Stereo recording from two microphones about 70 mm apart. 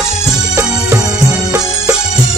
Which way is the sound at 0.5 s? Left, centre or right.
Right.